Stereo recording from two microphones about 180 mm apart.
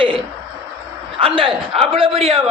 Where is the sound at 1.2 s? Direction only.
30° right (ahead or behind).